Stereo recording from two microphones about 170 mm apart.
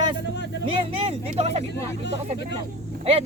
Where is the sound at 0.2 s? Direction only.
90° left.